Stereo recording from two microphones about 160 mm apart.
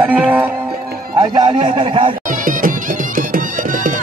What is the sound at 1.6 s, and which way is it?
Speech, 35° right (ahead or behind).